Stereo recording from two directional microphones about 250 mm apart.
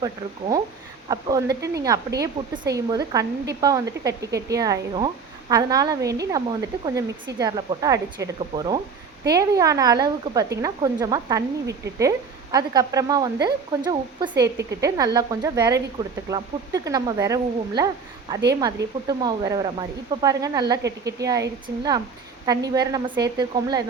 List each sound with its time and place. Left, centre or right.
0.0 s speech: centre